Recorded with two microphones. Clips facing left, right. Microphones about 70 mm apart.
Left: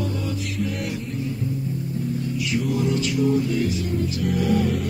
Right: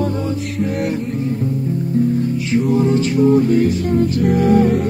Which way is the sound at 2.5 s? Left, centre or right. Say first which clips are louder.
Right 8 dB; right.